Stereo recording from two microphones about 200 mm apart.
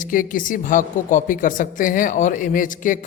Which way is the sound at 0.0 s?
40° left (ahead or behind).